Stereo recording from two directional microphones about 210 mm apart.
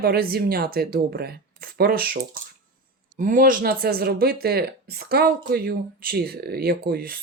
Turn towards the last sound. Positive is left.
turn(degrees=-45)  # may be behind; listen again after turning